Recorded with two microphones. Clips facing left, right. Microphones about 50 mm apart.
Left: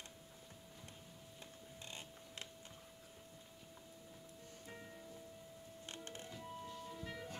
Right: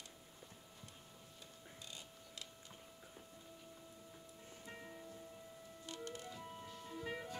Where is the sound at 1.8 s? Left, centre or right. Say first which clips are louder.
Left 4 dB; left.